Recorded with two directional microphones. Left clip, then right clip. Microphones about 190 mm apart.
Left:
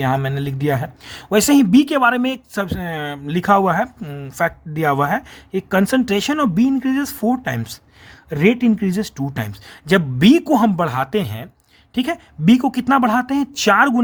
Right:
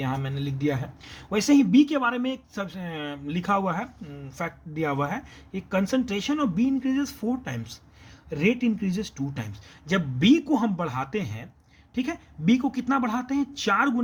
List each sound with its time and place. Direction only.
0.0 s speech: 50° left (ahead or behind)